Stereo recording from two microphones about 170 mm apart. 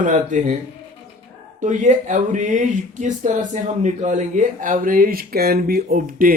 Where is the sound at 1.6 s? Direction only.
45° right (ahead or behind).